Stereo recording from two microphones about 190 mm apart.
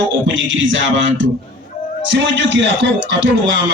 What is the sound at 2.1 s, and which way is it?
A man's voice, 70° right (ahead or behind).